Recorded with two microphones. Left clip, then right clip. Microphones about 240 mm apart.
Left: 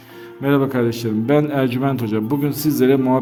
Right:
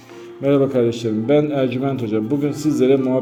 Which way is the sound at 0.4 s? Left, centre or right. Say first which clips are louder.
Right 2 dB; left.